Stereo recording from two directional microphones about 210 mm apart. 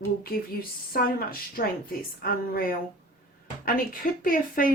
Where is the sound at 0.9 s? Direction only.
45° left (ahead or behind).